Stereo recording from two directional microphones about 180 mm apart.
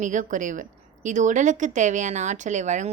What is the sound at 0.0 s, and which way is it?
A woman's voice, 45° right (ahead or behind).